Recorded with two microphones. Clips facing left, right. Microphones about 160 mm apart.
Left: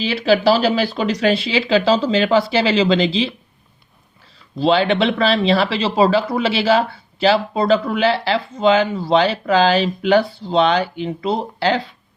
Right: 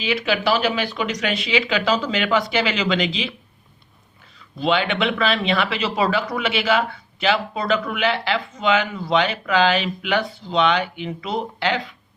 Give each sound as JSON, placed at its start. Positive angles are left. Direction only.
{"t": 0.0, "sound": "speech", "side_deg": 35}
{"t": 4.4, "sound": "speech", "side_deg": 30}